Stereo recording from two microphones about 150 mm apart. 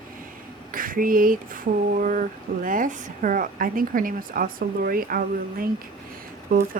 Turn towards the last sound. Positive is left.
turn(degrees=-70)  # may be behind; listen again after turning